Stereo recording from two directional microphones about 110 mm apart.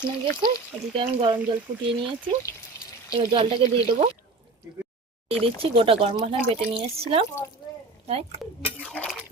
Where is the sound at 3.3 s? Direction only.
50° right (ahead or behind).